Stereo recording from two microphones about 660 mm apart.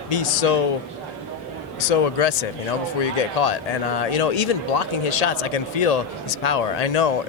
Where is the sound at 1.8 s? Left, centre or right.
Left.